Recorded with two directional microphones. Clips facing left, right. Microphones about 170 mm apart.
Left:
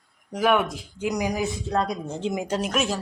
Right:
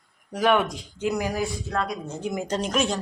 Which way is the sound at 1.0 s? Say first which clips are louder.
Even; 15° left (ahead or behind).